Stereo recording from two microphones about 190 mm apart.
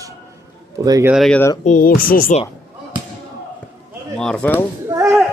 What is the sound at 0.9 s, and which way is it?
Speech, 20° right (ahead or behind).